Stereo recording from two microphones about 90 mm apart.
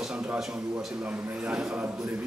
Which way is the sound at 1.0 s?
15° right (ahead or behind).